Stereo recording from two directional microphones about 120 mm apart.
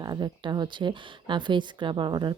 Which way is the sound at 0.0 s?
40° right (ahead or behind).